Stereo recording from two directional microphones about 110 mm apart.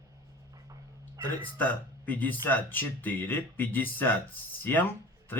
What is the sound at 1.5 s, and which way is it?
Speech, 15° left (ahead or behind).